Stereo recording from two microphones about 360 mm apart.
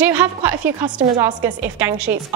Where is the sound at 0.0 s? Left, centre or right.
Centre.